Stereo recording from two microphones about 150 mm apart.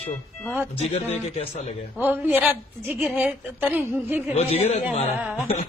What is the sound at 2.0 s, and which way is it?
A woman's voice, 10° right (ahead or behind).